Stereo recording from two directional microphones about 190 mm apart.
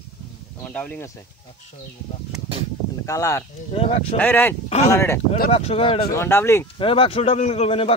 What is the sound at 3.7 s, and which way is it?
Speech, 30° left (ahead or behind).